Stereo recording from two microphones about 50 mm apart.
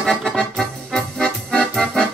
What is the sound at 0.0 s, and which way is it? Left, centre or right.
Music, centre.